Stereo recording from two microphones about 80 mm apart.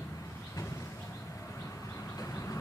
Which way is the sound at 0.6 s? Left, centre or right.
Left.